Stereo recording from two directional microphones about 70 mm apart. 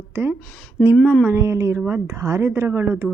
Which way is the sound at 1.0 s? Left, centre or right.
Left.